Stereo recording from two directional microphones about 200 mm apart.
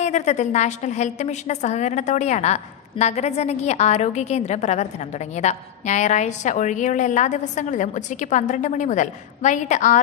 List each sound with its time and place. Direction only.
0.0 s a woman's voice: 35° left (ahead or behind)